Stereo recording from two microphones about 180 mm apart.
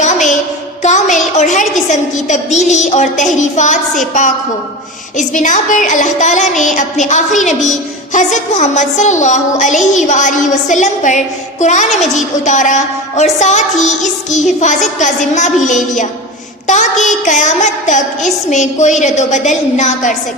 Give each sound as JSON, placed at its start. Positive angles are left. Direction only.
{"t": 0.0, "sound": "child singing", "side_deg": 40}
{"t": 0.8, "sound": "a woman's voice", "side_deg": 40}
{"t": 5.1, "sound": "a sound", "side_deg": 45}
{"t": 11.6, "sound": "a woman's voice", "side_deg": 40}